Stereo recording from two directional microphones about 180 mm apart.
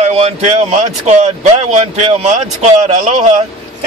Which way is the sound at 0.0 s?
40° right (ahead or behind).